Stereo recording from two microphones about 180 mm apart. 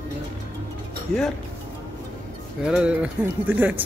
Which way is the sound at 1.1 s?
5° left (ahead or behind).